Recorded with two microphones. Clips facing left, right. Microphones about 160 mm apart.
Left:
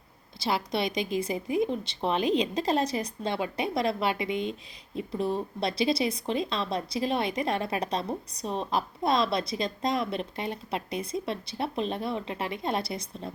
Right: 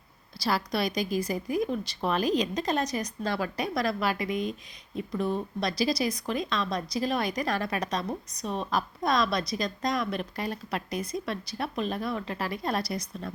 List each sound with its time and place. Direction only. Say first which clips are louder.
0.3 s speech: even; 25° left (ahead or behind)